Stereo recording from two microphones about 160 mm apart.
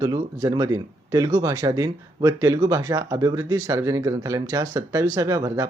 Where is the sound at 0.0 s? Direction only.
25° right (ahead or behind).